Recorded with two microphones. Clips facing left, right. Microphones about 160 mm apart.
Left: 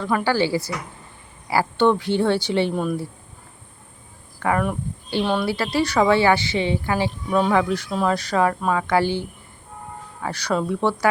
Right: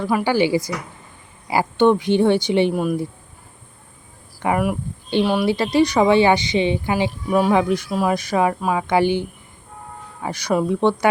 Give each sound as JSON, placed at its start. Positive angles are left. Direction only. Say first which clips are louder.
{"t": 0.0, "sound": "speech", "louder": "right 2 dB", "side_deg": -10}
{"t": 4.4, "sound": "speech", "louder": "right 2 dB", "side_deg": -10}
{"t": 10.2, "sound": "speech", "louder": "right 3 dB", "side_deg": -15}